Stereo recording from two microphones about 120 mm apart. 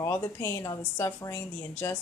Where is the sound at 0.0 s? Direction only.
20° left (ahead or behind).